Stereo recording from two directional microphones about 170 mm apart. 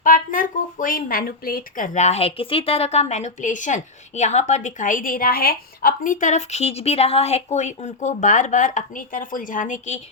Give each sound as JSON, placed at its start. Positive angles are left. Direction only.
{"t": 0.0, "sound": "speech", "side_deg": 55}